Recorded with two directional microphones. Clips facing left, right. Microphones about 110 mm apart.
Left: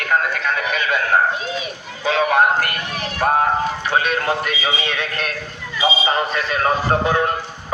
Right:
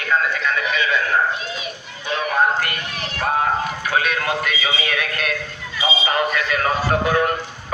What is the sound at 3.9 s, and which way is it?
Music, 35° left (ahead or behind).